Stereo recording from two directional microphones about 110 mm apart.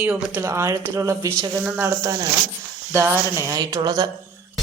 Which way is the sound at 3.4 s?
30° right (ahead or behind).